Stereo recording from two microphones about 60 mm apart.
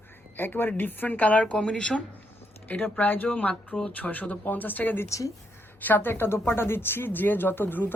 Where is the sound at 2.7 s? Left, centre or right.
Left.